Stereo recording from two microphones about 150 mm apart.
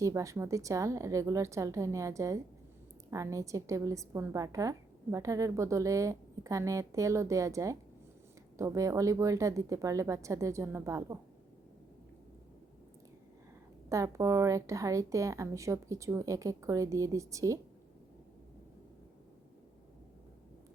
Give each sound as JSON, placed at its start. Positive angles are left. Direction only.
{"t": 0.0, "sound": "a woman's voice", "side_deg": -20}
{"t": 13.9, "sound": "a woman's voice", "side_deg": -20}